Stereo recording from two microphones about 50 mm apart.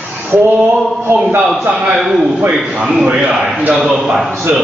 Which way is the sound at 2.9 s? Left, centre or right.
Centre.